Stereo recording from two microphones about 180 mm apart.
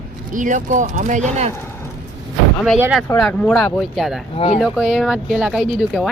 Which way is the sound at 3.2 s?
5° left (ahead or behind).